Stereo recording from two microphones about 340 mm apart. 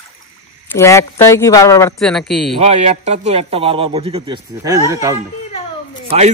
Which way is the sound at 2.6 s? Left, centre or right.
Centre.